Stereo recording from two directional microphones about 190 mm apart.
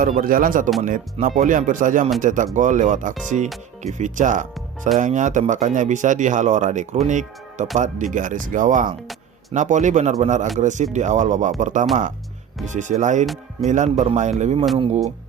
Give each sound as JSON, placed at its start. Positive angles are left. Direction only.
{"t": 0.0, "sound": "speech", "side_deg": -45}
{"t": 13.2, "sound": "speech", "side_deg": 0}
{"t": 13.7, "sound": "speech", "side_deg": -40}